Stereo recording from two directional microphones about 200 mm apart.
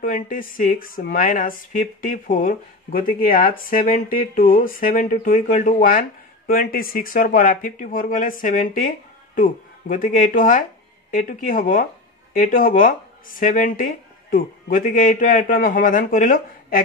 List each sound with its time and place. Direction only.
0.0 s speech: 45° left (ahead or behind)